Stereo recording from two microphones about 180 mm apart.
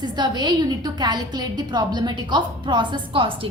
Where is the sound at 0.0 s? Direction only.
25° right (ahead or behind).